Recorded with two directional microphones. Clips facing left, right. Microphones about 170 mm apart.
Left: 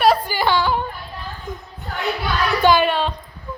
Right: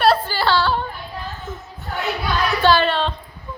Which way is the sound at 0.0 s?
15° left (ahead or behind).